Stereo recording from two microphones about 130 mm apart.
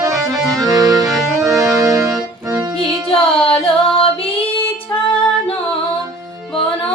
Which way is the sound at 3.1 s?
45° left (ahead or behind).